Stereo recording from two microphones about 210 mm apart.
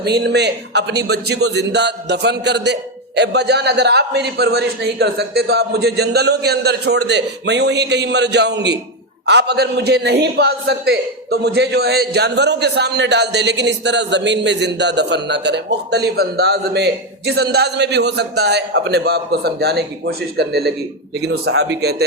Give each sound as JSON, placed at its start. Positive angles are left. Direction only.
{"t": 0.0, "sound": "a man's voice", "side_deg": -50}